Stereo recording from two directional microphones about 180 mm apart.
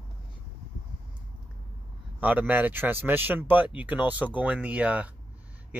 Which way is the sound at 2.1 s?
10° right (ahead or behind).